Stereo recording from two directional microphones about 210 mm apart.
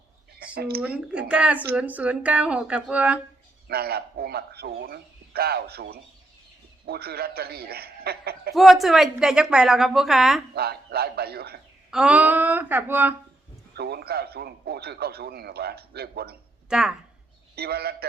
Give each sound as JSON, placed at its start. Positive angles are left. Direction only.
{"t": 0.3, "sound": "a sound", "side_deg": -45}
{"t": 0.8, "sound": "a woman's voice", "side_deg": -5}
{"t": 3.7, "sound": "a man's voice", "side_deg": -50}
{"t": 8.5, "sound": "a woman's voice", "side_deg": 0}
{"t": 10.5, "sound": "a man's voice", "side_deg": -50}
{"t": 11.9, "sound": "speech", "side_deg": -5}
{"t": 13.7, "sound": "a man's voice", "side_deg": -50}
{"t": 16.6, "sound": "speech", "side_deg": -5}
{"t": 17.5, "sound": "a man's voice", "side_deg": -50}